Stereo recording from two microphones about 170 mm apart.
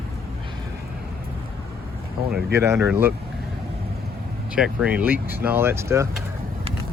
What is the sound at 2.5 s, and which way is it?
Speech, 15° right (ahead or behind).